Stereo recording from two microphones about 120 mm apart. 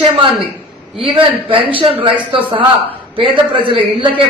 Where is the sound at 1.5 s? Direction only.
45° right (ahead or behind).